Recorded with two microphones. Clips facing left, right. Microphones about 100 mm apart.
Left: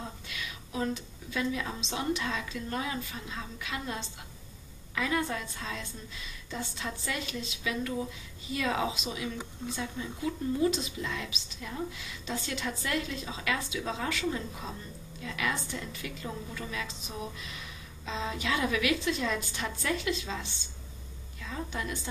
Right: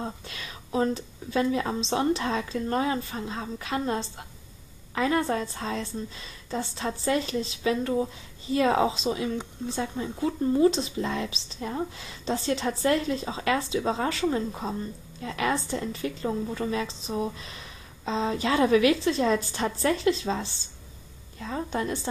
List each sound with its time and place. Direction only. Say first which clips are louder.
0.0 s speech: right 5 dB; 35° right (ahead or behind)